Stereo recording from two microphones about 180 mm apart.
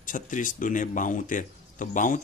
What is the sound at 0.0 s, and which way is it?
Speech, 45° left (ahead or behind).